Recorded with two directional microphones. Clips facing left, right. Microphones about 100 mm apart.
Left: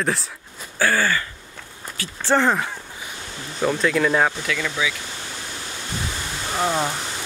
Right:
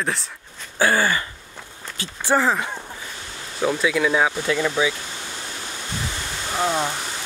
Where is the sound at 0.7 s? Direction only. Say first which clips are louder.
Right 1 dB; 20° right (ahead or behind).